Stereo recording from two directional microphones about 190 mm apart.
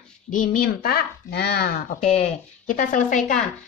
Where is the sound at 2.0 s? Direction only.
40° left (ahead or behind).